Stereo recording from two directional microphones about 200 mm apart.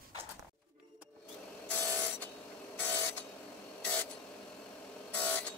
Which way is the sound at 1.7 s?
5° left (ahead or behind).